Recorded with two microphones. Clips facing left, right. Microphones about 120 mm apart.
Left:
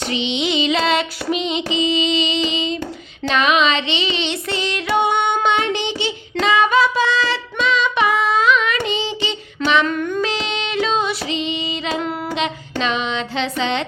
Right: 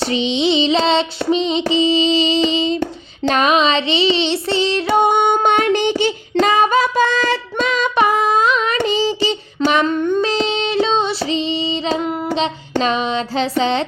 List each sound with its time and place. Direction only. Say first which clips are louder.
0.0 s child singing: right 4 dB; 35° right (ahead or behind)
4.9 s child singing: right 2 dB; 45° right (ahead or behind)
9.8 s child singing: right 4 dB; 25° right (ahead or behind)
12.3 s music: right 4 dB; 35° right (ahead or behind)